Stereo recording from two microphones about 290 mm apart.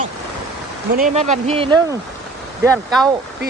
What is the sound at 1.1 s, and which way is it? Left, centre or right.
Speech, right.